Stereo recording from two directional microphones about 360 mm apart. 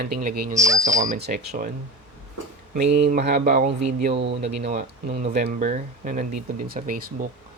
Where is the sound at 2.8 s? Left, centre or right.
Right.